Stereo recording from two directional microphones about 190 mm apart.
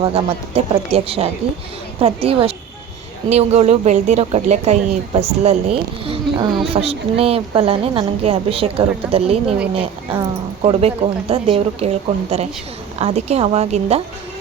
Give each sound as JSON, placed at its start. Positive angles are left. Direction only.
{"t": 0.0, "sound": "a woman's voice", "side_deg": -30}